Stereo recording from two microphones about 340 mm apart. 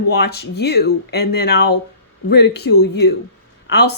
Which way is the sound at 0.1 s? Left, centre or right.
Left.